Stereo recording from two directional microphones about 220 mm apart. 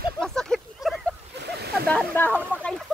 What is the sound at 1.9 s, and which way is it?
Speech, 5° left (ahead or behind).